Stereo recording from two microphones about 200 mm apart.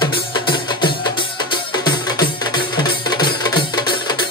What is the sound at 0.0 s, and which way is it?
Music, 25° left (ahead or behind).